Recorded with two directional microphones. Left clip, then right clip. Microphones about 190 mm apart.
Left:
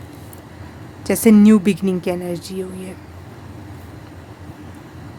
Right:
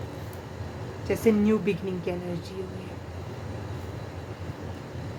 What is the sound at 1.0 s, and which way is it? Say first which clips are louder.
Speech: left 10 dB; 60° left (ahead or behind).